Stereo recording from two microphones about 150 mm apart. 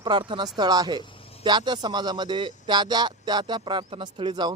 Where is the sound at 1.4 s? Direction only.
30° right (ahead or behind).